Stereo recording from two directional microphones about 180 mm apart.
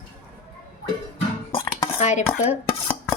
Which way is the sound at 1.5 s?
30° left (ahead or behind).